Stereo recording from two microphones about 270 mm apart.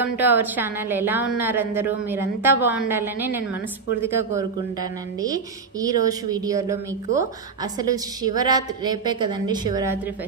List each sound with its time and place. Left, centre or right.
0.2 s a woman's voice: centre